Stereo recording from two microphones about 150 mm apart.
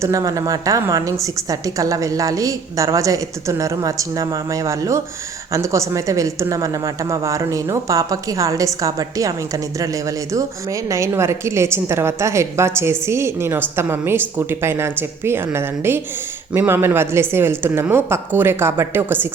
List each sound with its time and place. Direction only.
0.0 s a woman's voice: 20° right (ahead or behind)